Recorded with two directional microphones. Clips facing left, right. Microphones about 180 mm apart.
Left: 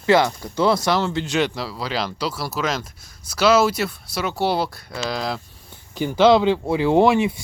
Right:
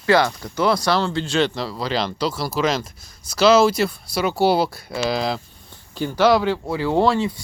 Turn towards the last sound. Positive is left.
turn(degrees=15)  # may be behind; listen again after turning